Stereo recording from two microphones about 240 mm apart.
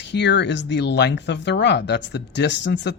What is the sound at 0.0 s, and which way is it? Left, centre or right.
Speech, left.